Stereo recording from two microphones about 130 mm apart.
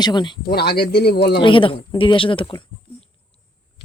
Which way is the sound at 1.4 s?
40° left (ahead or behind).